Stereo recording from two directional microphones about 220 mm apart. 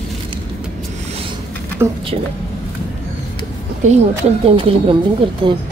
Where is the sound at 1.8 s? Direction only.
10° right (ahead or behind).